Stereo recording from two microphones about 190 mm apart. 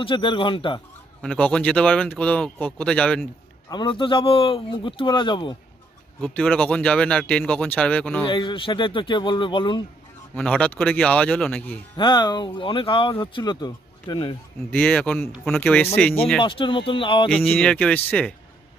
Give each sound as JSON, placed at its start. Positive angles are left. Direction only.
{"t": 0.0, "sound": "speech", "side_deg": 25}
{"t": 1.2, "sound": "speech", "side_deg": 5}
{"t": 3.7, "sound": "speech", "side_deg": 25}
{"t": 6.2, "sound": "speech", "side_deg": 5}
{"t": 8.3, "sound": "speech", "side_deg": 25}
{"t": 10.3, "sound": "speech", "side_deg": 5}
{"t": 11.9, "sound": "speech", "side_deg": 25}
{"t": 14.7, "sound": "speech", "side_deg": 10}
{"t": 16.4, "sound": "speech", "side_deg": 25}
{"t": 17.2, "sound": "speech", "side_deg": 5}